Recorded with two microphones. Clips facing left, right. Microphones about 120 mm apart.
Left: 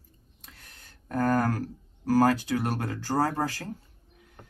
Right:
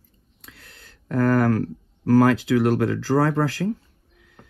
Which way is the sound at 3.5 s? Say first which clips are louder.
Right 12 dB; 90° right.